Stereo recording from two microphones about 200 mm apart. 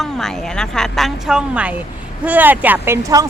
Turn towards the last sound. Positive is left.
turn(degrees=-15)  # may be behind; listen again after turning